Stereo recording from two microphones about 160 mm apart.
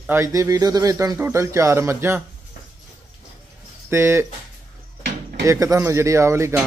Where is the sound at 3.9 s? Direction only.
15° right (ahead or behind).